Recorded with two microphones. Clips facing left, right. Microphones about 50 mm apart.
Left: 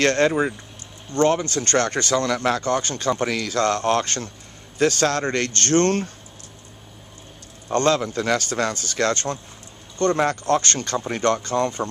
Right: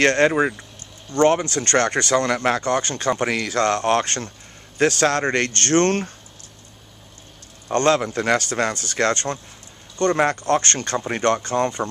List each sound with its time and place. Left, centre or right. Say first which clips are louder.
0.0 s speech: right 2 dB; right
1.8 s speech: right 2 dB; right
7.8 s speech: right 2 dB; right
9.1 s speech: right 1 dB; right